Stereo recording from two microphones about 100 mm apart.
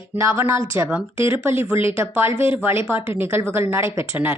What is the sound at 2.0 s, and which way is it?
A woman's voice, 25° right (ahead or behind).